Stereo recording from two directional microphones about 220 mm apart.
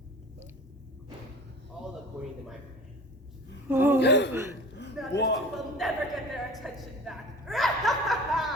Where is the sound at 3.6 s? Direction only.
10° right (ahead or behind).